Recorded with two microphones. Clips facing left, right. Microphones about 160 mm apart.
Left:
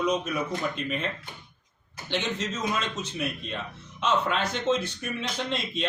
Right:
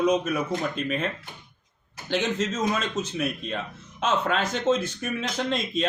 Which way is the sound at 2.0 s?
45° right (ahead or behind).